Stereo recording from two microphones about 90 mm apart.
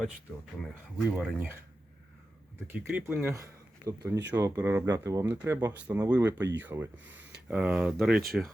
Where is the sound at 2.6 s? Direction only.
20° right (ahead or behind); by 4.5 s 40° right (ahead or behind).